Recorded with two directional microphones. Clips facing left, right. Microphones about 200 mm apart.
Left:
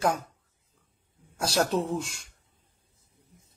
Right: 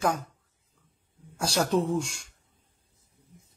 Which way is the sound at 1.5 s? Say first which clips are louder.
Right 1 dB; 5° left (ahead or behind).